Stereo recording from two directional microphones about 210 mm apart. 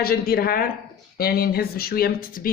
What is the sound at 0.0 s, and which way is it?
Speech, 45° left (ahead or behind).